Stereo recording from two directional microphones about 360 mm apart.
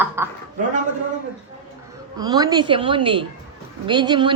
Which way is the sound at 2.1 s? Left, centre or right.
Centre.